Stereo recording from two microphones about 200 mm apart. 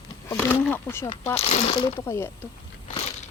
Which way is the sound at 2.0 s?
10° left (ahead or behind).